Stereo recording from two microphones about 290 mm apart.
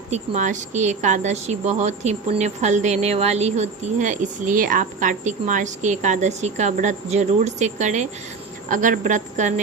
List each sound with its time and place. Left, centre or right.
0.1 s speech: right